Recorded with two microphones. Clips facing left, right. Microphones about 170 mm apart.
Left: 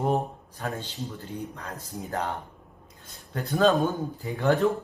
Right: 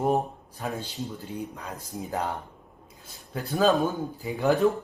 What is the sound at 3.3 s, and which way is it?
Speech, centre (ahead or behind).